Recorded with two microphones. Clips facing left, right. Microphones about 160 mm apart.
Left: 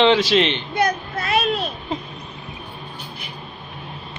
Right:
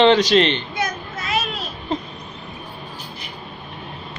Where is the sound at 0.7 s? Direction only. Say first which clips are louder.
Left 5 dB; 60° left (ahead or behind).